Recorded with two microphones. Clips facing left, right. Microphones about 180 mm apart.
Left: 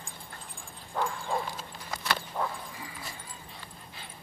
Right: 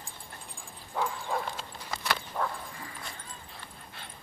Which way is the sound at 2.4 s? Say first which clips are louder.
Right 1 dB; 20° left (ahead or behind).